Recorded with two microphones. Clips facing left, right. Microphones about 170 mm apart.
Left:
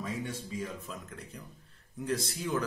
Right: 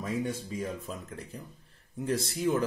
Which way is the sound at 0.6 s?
30° right (ahead or behind).